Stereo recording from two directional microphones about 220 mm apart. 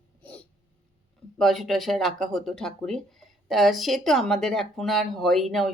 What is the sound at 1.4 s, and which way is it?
Speech, centre (ahead or behind).